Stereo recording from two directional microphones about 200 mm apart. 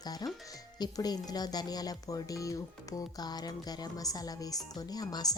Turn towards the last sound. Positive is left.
turn(degrees=20)  # may be behind; listen again after turning